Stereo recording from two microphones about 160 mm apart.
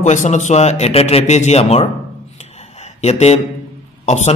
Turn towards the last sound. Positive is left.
turn(degrees=45)  # may be behind; listen again after turning